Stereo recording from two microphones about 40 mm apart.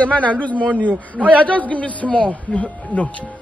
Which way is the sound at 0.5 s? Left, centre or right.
Right.